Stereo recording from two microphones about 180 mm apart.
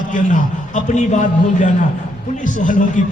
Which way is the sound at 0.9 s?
45° left (ahead or behind).